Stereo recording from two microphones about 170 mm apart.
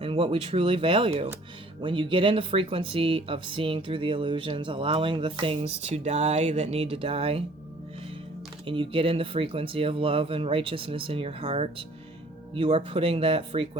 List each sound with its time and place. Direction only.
0.0 s speech: 35° right (ahead or behind)
8.6 s speech: 30° right (ahead or behind)